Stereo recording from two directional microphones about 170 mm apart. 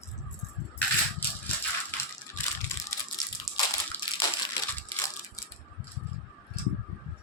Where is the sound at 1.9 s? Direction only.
10° left (ahead or behind).